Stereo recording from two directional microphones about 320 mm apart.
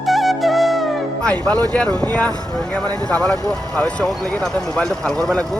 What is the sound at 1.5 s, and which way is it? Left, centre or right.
Speech, centre.